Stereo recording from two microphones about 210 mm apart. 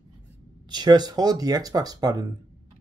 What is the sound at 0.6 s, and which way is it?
Speech, 20° right (ahead or behind).